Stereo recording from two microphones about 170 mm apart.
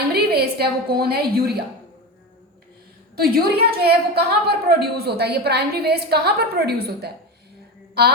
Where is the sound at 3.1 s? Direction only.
65° right (ahead or behind).